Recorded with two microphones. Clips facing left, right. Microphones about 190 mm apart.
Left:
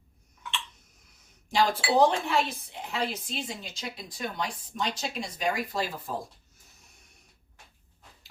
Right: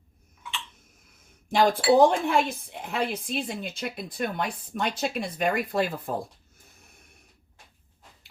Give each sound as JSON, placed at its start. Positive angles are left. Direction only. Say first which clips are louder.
{"t": 1.5, "sound": "speech", "louder": "right 6 dB", "side_deg": -55}